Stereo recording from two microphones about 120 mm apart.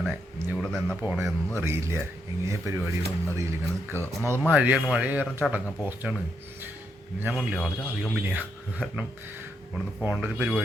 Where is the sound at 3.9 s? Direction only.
20° right (ahead or behind).